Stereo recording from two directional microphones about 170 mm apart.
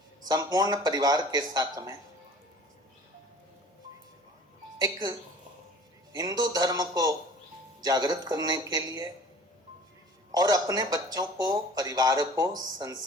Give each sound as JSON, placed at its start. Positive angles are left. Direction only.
{"t": 0.3, "sound": "speech", "side_deg": -20}
{"t": 4.8, "sound": "speech", "side_deg": -20}
{"t": 6.1, "sound": "speech", "side_deg": -20}
{"t": 10.3, "sound": "speech", "side_deg": -20}